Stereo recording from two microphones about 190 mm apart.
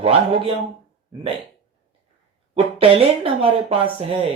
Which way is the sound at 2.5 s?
30° right (ahead or behind).